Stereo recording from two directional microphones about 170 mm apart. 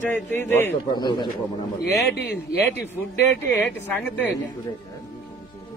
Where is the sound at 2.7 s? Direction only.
10° left (ahead or behind).